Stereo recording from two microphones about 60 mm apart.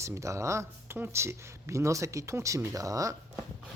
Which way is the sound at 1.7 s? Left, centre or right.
Right.